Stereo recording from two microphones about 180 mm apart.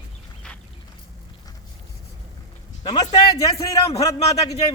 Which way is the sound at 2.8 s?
25° left (ahead or behind).